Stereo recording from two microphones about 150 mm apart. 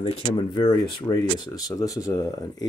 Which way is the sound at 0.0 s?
35° left (ahead or behind).